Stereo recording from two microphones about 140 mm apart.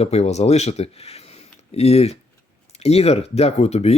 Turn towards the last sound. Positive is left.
turn(degrees=50)  # may be behind; listen again after turning